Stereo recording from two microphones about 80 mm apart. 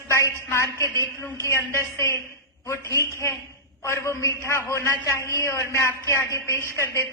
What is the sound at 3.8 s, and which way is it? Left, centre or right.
A man's voice, left.